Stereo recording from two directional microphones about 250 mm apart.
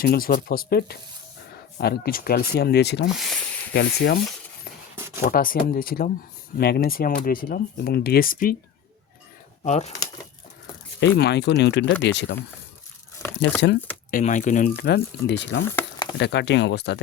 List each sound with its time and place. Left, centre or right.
0.0 s speech: left
3.1 s a sound: centre
3.7 s speech: left
5.3 s speech: left
9.6 s speech: left
11.0 s speech: left
13.6 s speech: left
14.1 s speech: left
14.8 s speech: left
15.7 s a sound: centre
16.1 s speech: left